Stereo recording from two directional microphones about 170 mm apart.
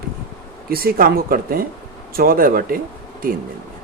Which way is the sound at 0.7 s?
60° right (ahead or behind).